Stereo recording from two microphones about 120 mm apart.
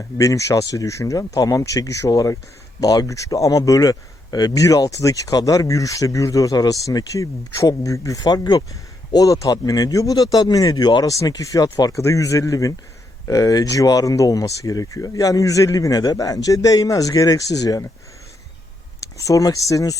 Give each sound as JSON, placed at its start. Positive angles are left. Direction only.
{"t": 0.2, "sound": "speech", "side_deg": 25}
{"t": 19.1, "sound": "speech", "side_deg": 30}